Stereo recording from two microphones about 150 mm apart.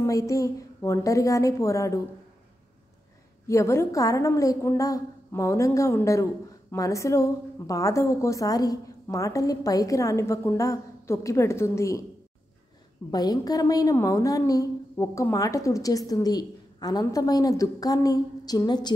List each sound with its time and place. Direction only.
0.0 s a woman's voice: 20° left (ahead or behind)
3.4 s a woman's voice: 20° left (ahead or behind)
13.1 s a woman's voice: 25° left (ahead or behind)